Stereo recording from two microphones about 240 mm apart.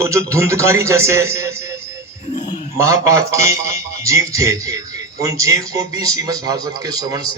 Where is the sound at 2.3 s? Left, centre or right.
Left.